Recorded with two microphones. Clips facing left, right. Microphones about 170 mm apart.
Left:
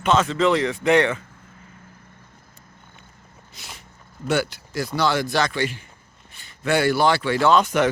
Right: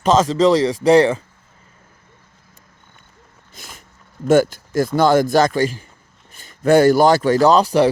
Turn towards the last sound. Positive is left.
turn(degrees=-35)  # may be behind; listen again after turning